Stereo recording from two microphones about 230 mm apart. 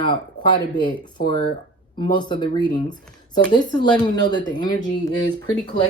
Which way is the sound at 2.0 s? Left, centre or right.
Centre.